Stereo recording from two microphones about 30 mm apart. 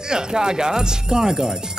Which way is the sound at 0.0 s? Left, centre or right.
Right.